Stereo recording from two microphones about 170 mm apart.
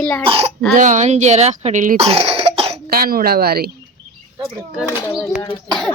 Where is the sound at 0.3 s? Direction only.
35° right (ahead or behind).